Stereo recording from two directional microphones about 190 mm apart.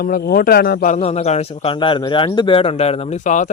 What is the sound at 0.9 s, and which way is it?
Speech, 35° left (ahead or behind).